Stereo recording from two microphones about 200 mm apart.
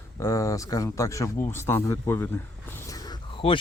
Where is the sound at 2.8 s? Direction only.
20° left (ahead or behind).